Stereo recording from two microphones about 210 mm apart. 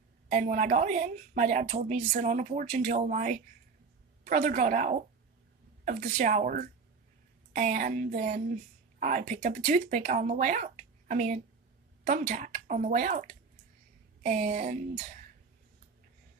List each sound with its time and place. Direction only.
0.3 s a woman's voice: 35° right (ahead or behind)